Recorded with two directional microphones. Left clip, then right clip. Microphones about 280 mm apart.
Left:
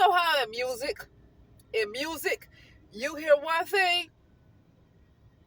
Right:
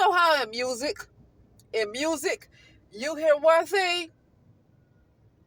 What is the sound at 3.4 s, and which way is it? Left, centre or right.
Speech, centre.